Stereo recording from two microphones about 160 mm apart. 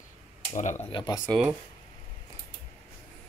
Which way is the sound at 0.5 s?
50° left (ahead or behind).